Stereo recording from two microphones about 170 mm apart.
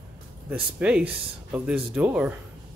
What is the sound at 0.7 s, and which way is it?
Speech, 5° right (ahead or behind).